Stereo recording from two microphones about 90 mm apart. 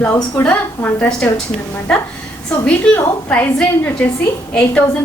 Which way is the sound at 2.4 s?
15° left (ahead or behind).